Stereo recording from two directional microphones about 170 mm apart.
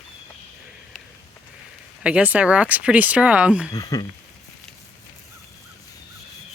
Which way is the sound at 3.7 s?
20° left (ahead or behind).